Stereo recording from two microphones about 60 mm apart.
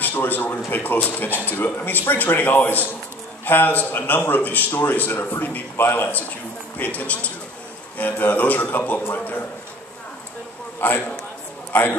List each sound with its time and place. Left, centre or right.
0.0 s a man's voice: left
6.8 s a man's voice: left
10.8 s a man's voice: left